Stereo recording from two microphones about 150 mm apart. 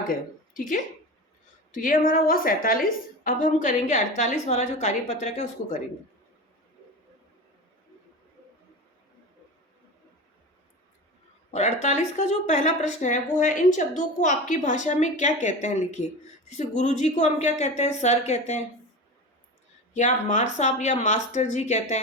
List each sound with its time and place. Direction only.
0.1 s a woman's voice: 65° left (ahead or behind)
3.2 s speech: 60° left (ahead or behind)
11.5 s speech: 50° left (ahead or behind)
19.9 s speech: 55° left (ahead or behind)